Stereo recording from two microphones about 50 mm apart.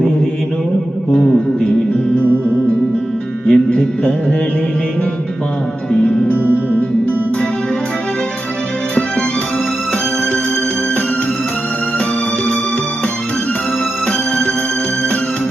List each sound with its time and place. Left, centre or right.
1.1 s music: centre
3.4 s music: centre
6.3 s music: right
14.1 s music: left